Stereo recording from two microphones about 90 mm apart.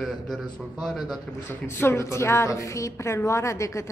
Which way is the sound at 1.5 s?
30° left (ahead or behind).